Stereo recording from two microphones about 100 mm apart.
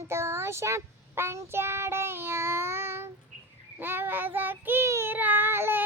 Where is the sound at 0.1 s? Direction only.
25° right (ahead or behind).